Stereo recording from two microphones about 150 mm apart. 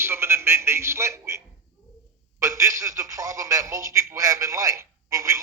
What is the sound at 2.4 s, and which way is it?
A man's voice, 20° right (ahead or behind).